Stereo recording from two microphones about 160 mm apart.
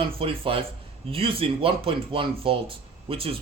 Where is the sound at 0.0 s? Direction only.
35° right (ahead or behind).